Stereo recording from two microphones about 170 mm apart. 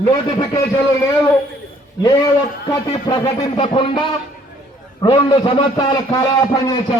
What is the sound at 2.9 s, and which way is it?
A man's voice, 30° left (ahead or behind).